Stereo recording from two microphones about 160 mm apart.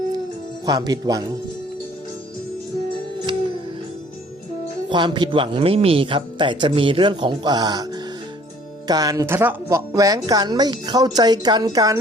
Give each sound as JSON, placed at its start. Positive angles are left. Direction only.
{"t": 0.6, "sound": "a woman's voice", "side_deg": -25}
{"t": 4.9, "sound": "a man's voice", "side_deg": -30}
{"t": 8.9, "sound": "a woman's voice", "side_deg": -25}